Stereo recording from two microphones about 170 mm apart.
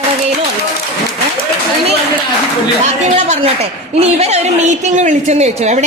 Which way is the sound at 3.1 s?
40° right (ahead or behind).